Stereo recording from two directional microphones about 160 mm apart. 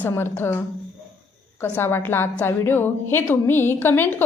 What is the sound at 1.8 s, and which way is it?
A woman's voice, 15° left (ahead or behind).